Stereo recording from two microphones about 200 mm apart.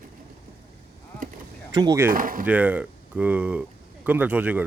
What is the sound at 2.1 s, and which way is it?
Speech, 45° right (ahead or behind).